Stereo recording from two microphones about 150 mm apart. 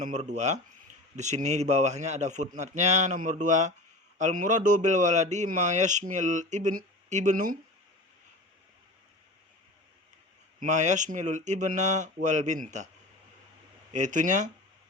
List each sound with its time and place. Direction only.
0.0 s a man's voice: 50° right (ahead or behind)
10.6 s a man's voice: 55° right (ahead or behind)
13.9 s a man's voice: 55° right (ahead or behind)